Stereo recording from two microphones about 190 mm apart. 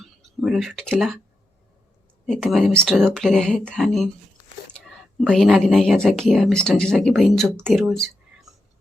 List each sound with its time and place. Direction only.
0.0 s speech: centre (ahead or behind)
2.2 s speech: centre (ahead or behind)